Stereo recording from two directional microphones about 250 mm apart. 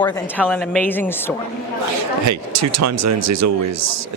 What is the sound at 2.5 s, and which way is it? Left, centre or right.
Speech, right.